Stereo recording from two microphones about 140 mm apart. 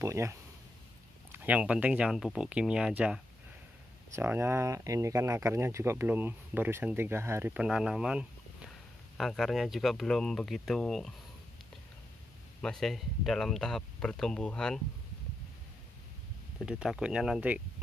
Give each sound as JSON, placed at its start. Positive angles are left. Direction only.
{"t": 0.0, "sound": "speech", "side_deg": -20}
{"t": 7.5, "sound": "speech", "side_deg": -5}
{"t": 12.6, "sound": "speech", "side_deg": 0}
{"t": 16.6, "sound": "speech", "side_deg": -5}